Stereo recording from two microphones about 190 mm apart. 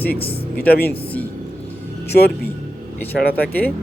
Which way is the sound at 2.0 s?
55° left (ahead or behind).